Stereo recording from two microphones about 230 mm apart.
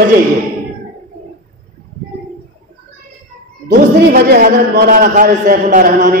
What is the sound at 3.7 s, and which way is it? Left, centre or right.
A man's voice, right.